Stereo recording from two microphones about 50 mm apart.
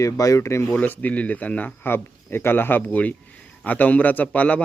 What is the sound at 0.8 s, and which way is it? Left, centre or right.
Speech, left.